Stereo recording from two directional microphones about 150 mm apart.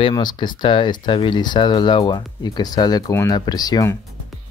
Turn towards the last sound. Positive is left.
turn(degrees=20)  # may be behind; listen again after turning